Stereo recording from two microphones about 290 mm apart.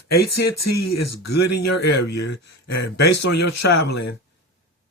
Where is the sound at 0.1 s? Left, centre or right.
Left.